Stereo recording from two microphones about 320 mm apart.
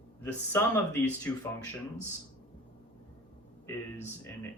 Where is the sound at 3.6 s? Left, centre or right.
Centre.